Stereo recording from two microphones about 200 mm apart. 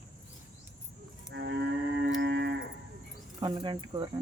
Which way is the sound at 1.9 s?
60° right (ahead or behind).